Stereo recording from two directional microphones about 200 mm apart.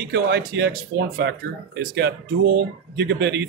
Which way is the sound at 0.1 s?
60° right (ahead or behind).